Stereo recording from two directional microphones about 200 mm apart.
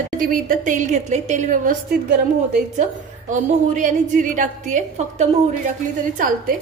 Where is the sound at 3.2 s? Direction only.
40° right (ahead or behind).